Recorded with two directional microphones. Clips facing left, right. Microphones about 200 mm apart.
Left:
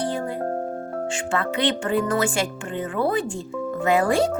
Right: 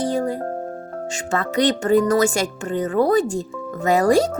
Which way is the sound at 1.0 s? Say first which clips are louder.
Right 2 dB; 40° right (ahead or behind).